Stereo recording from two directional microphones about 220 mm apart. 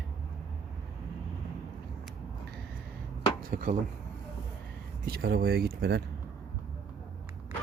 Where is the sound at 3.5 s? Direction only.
40° right (ahead or behind).